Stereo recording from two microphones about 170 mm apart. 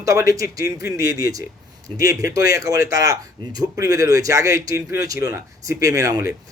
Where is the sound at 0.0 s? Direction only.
20° right (ahead or behind).